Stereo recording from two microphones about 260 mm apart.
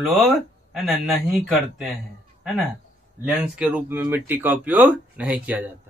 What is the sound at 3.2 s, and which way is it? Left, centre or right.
A man's voice, centre.